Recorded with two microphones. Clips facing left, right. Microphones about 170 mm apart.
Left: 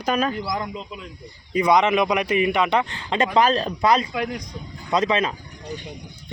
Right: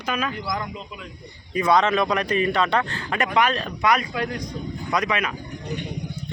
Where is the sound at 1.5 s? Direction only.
15° left (ahead or behind).